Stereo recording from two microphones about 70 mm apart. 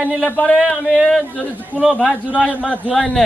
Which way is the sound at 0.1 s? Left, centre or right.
Left.